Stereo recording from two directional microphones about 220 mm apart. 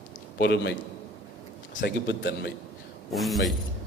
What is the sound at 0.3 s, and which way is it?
Speech, 50° left (ahead or behind).